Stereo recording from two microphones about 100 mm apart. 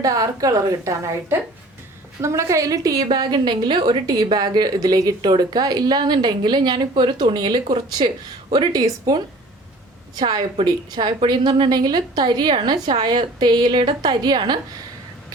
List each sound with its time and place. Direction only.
0.0 s a woman's voice: 35° right (ahead or behind)
8.7 s a woman's voice: 40° right (ahead or behind)